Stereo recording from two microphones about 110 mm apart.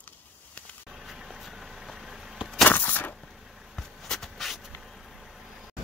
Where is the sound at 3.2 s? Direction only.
Centre (ahead or behind).